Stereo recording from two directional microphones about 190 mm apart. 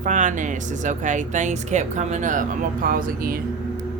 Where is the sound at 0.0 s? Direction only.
40° right (ahead or behind).